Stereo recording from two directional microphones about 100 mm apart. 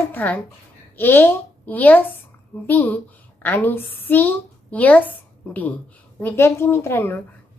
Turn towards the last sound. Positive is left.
turn(degrees=20)  # may be behind; listen again after turning